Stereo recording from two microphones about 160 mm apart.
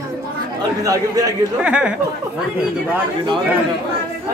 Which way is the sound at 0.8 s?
20° right (ahead or behind).